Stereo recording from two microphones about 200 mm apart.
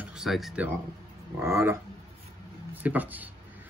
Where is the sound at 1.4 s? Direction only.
15° right (ahead or behind).